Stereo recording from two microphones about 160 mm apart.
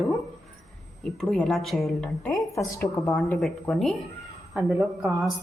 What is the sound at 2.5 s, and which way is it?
Speech, 20° left (ahead or behind).